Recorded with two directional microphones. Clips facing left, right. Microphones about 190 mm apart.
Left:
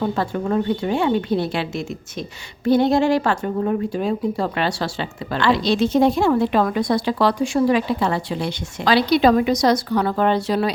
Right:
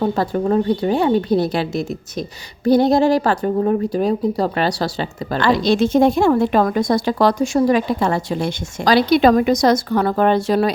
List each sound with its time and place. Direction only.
0.0 s a woman's voice: 35° right (ahead or behind)